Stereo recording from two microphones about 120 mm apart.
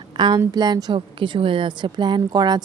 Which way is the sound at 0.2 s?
35° right (ahead or behind).